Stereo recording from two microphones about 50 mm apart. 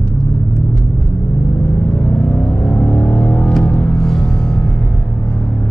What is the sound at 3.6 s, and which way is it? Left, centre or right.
Music, centre.